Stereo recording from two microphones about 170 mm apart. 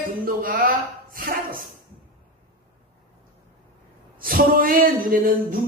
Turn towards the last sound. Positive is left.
turn(degrees=-55)  # may be behind; listen again after turning